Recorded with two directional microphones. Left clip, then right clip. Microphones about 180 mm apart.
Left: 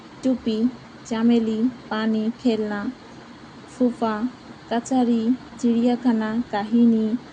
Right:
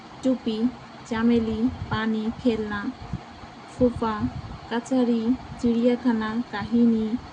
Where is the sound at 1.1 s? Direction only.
15° left (ahead or behind).